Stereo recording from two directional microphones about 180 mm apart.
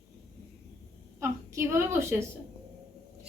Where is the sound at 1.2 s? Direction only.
15° right (ahead or behind).